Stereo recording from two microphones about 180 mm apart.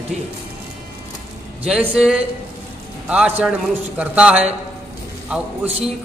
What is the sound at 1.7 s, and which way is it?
A man's voice, 5° right (ahead or behind).